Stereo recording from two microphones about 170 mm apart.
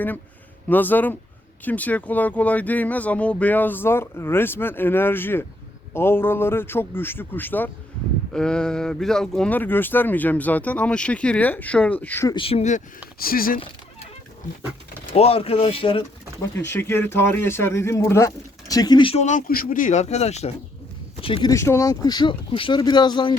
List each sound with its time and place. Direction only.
0.7 s speech: 10° left (ahead or behind)
12.3 s speech: 35° left (ahead or behind)
13.1 s speech: 60° left (ahead or behind)
15.1 s speech: 35° left (ahead or behind)
16.4 s speech: 15° left (ahead or behind)
19.2 s speech: 45° left (ahead or behind); by 21.5 s 30° left (ahead or behind)
21.5 s speech: 15° left (ahead or behind)